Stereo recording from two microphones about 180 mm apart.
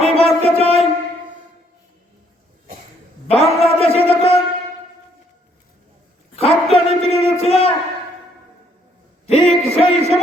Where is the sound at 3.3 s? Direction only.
35° left (ahead or behind).